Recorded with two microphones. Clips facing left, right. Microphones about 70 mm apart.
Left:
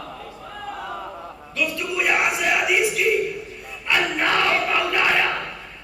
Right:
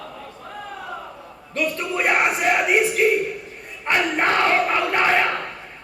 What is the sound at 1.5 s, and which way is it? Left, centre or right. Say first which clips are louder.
Crowd: right 2 dB; right.